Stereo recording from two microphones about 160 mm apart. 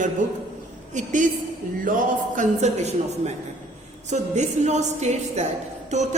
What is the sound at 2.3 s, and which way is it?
Speech, 50° right (ahead or behind).